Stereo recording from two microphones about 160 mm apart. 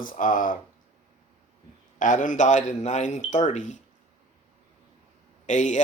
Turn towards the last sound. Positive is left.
turn(degrees=50)  # may be behind; listen again after turning